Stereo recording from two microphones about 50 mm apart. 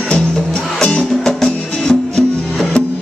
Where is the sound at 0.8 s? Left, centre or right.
Left.